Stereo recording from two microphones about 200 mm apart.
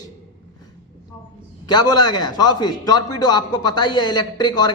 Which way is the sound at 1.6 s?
20° left (ahead or behind).